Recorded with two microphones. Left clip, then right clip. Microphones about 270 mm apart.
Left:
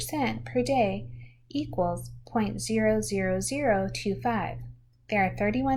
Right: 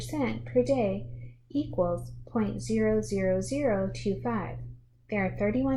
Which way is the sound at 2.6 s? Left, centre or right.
Left.